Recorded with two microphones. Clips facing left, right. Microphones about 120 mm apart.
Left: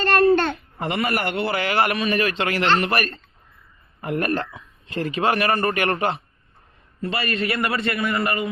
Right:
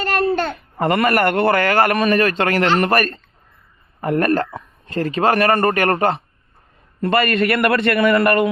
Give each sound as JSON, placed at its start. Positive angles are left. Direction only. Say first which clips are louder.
{"t": 0.0, "sound": "babbling", "louder": "left 2 dB", "side_deg": -10}
{"t": 0.8, "sound": "speech", "louder": "right 8 dB", "side_deg": -50}
{"t": 7.0, "sound": "a man's voice", "louder": "right 8 dB", "side_deg": -60}